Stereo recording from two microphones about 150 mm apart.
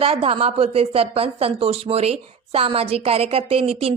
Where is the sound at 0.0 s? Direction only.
40° right (ahead or behind).